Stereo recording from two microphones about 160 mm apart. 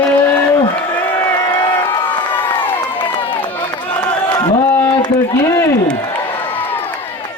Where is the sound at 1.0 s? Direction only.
15° left (ahead or behind).